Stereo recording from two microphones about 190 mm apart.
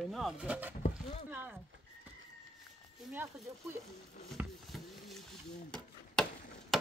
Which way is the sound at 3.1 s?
10° right (ahead or behind).